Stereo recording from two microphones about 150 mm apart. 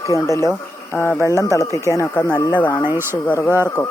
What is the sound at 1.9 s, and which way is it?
Speech, 20° left (ahead or behind).